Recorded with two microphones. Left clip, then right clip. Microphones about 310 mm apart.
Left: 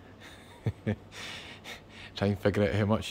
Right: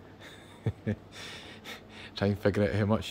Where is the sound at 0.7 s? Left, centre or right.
Centre.